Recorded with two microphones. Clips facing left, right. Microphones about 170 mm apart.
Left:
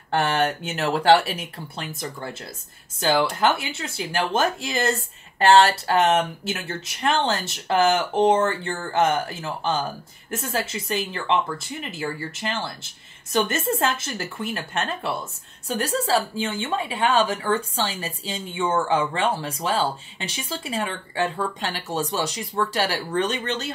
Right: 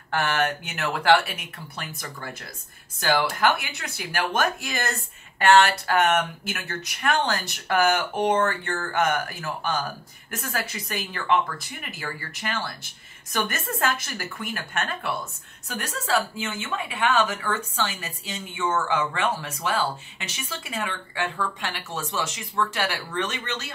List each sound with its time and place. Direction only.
0.1 s a woman's voice: 30° left (ahead or behind)